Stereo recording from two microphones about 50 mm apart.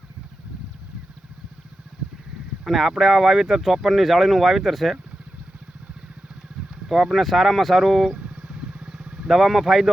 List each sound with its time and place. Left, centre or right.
2.6 s speech: centre
6.8 s speech: centre
8.2 s vehicle: right
9.2 s speech: centre